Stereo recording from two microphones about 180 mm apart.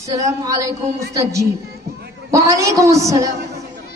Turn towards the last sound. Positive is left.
turn(degrees=-15)  # may be behind; listen again after turning